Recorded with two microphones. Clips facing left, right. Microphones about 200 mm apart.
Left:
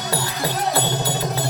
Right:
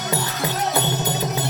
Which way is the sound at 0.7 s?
20° right (ahead or behind).